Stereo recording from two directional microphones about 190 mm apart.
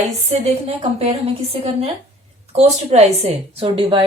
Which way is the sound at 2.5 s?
35° right (ahead or behind).